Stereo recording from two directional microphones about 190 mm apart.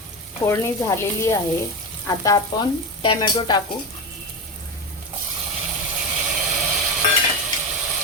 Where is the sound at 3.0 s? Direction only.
25° left (ahead or behind).